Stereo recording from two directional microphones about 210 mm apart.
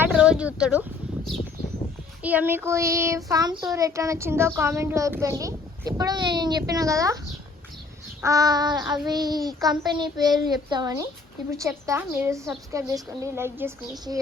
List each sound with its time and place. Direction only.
0.0 s speech: 5° right (ahead or behind)
2.2 s child singing: 10° right (ahead or behind)
8.2 s child singing: 15° right (ahead or behind)